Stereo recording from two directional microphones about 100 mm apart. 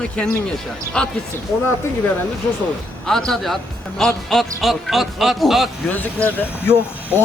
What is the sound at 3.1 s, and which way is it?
A man's voice, 5° left (ahead or behind).